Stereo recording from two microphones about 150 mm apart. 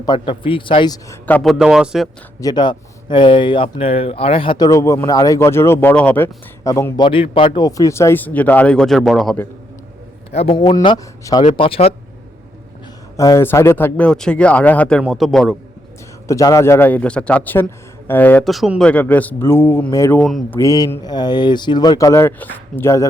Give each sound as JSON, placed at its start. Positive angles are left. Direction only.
{"t": 0.0, "sound": "speech", "side_deg": 30}
{"t": 1.4, "sound": "speech", "side_deg": 0}
{"t": 2.4, "sound": "speech", "side_deg": 30}
{"t": 7.0, "sound": "speech", "side_deg": 35}
{"t": 10.5, "sound": "speech", "side_deg": 25}
{"t": 11.5, "sound": "speech", "side_deg": 35}
{"t": 13.1, "sound": "speech", "side_deg": 20}
{"t": 16.2, "sound": "speech", "side_deg": 20}
{"t": 18.4, "sound": "speech", "side_deg": 0}
{"t": 20.1, "sound": "speech", "side_deg": 0}
{"t": 20.5, "sound": "speech", "side_deg": 20}